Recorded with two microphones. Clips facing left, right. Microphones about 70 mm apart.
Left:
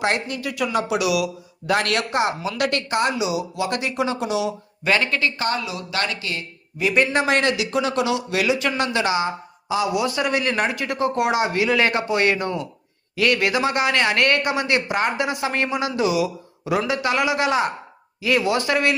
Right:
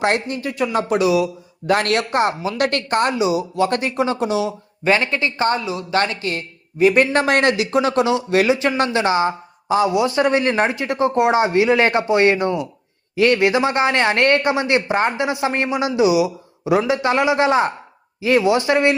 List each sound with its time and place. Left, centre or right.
0.0 s a man's voice: right